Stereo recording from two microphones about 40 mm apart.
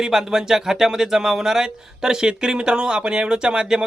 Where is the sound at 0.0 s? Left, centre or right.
Centre.